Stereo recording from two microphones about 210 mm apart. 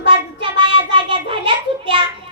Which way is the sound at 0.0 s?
25° right (ahead or behind).